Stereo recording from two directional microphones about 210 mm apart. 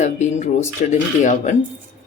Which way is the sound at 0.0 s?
30° left (ahead or behind).